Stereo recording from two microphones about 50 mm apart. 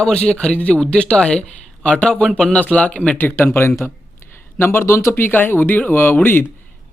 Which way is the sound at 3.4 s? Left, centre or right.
Left.